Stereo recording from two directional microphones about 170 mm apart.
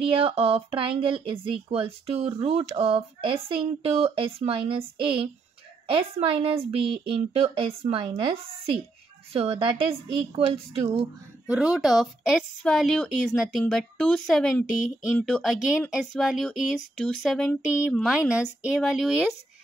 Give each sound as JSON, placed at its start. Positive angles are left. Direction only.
{"t": 0.0, "sound": "speech", "side_deg": -35}
{"t": 5.9, "sound": "speech", "side_deg": -35}
{"t": 9.3, "sound": "speech", "side_deg": -35}
{"t": 11.4, "sound": "a woman's voice", "side_deg": -5}